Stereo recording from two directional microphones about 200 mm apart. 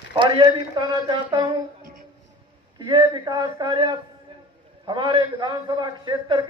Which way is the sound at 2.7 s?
20° right (ahead or behind).